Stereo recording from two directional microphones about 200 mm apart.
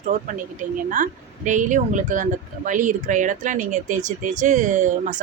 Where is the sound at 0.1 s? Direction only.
40° right (ahead or behind).